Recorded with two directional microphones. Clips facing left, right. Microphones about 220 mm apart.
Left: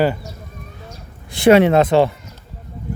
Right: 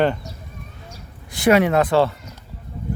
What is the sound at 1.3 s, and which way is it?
Speech, 25° left (ahead or behind).